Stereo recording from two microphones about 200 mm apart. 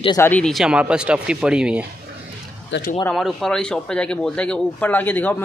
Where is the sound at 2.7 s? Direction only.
65° left (ahead or behind).